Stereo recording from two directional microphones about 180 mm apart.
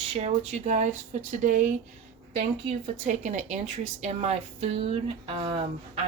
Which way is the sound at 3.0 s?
40° right (ahead or behind).